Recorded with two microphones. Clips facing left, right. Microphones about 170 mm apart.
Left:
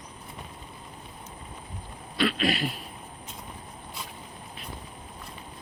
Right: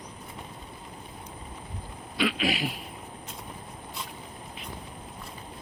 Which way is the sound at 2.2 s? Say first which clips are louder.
Left 1 dB; 10° right (ahead or behind).